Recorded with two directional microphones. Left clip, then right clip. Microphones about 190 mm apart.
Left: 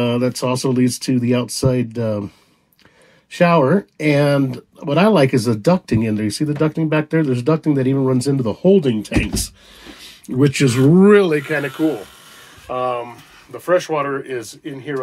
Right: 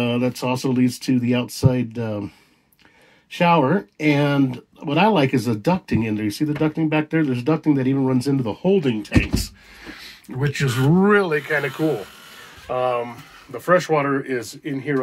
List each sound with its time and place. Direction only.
0.0 s speech: 10° right (ahead or behind)
3.4 s speech: 15° right (ahead or behind)
10.2 s speech: 50° right (ahead or behind)
11.0 s speech: 35° right (ahead or behind)
11.4 s speech: 10° right (ahead or behind)
12.6 s speech: 5° left (ahead or behind)